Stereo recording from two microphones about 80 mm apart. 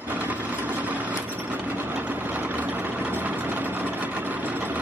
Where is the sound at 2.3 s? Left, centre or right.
Right.